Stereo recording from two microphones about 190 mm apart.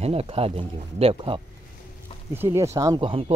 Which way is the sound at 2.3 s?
10° right (ahead or behind).